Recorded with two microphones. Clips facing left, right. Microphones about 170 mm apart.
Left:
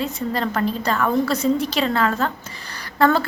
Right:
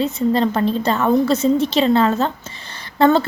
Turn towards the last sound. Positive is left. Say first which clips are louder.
# right 4 dB
turn(degrees=-25)  # may be behind; listen again after turning